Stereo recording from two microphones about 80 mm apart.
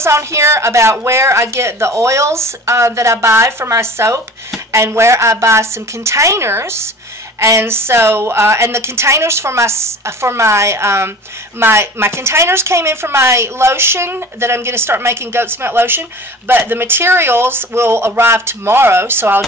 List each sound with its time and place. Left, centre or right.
0.0 s speech: right